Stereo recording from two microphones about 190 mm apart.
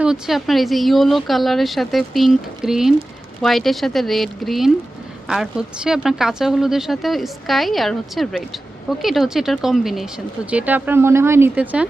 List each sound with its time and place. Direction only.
0.0 s speech: centre (ahead or behind)